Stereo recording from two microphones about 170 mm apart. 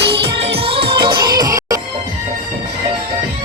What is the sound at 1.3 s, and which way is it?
Music, 20° right (ahead or behind).